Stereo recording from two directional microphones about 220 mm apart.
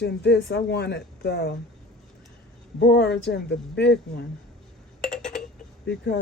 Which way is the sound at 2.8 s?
50° left (ahead or behind).